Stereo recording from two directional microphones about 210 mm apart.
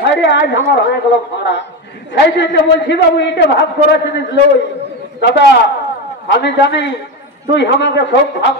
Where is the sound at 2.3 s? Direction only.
60° left (ahead or behind).